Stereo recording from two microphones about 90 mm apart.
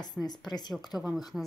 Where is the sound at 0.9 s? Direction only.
10° right (ahead or behind).